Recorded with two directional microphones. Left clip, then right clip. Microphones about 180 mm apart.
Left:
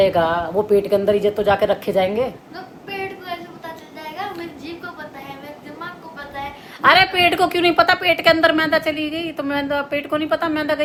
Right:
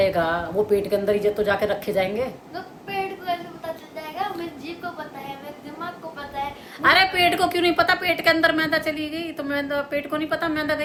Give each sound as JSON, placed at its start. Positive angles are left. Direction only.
{"t": 0.0, "sound": "a woman's voice", "side_deg": 25}
{"t": 3.3, "sound": "a sound", "side_deg": -5}
{"t": 6.8, "sound": "a woman's voice", "side_deg": 20}